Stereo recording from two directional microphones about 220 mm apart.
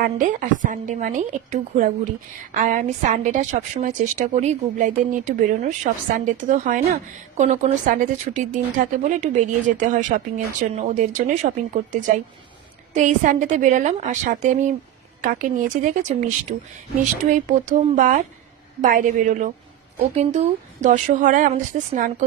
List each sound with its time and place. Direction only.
0.0 s a woman's voice: 35° right (ahead or behind)